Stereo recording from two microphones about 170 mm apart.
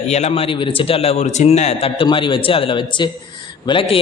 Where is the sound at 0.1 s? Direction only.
40° left (ahead or behind).